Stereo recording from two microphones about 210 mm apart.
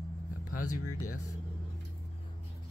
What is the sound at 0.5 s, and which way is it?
Speech, 90° left.